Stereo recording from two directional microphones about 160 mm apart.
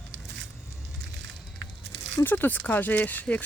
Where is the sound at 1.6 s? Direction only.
90° right.